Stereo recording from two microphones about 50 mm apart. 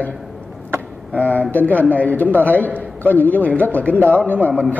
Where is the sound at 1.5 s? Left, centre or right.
Left.